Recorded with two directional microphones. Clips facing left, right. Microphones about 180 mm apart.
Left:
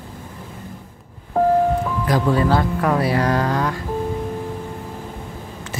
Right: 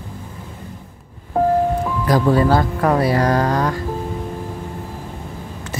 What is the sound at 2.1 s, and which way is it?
Speech, 40° right (ahead or behind).